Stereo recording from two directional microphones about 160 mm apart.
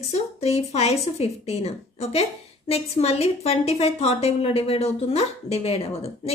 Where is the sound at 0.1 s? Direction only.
40° left (ahead or behind).